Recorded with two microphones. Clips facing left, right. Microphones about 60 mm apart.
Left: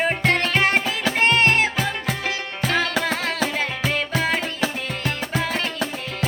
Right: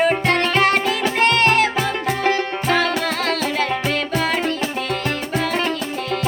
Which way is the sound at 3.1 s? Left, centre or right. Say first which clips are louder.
Right 2 dB; centre.